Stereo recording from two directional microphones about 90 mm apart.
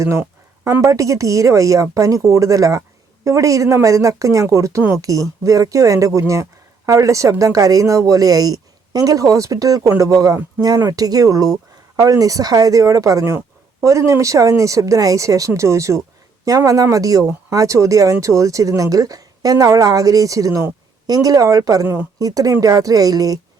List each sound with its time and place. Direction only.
0.6 s speech: 35° right (ahead or behind)